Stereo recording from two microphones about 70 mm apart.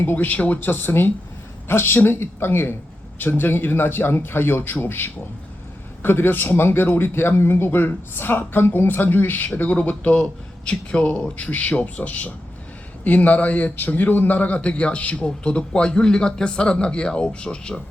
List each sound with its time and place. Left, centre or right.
0.0 s a man's voice: left